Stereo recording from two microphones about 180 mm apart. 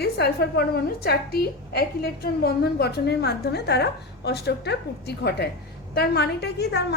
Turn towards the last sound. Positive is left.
turn(degrees=65)  # may be behind; listen again after turning